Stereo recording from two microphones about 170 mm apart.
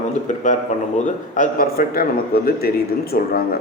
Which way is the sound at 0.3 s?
50° left (ahead or behind).